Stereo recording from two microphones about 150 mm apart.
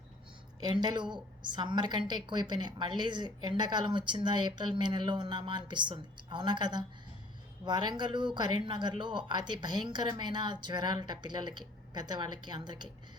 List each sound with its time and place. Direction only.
0.6 s a woman's voice: 30° right (ahead or behind)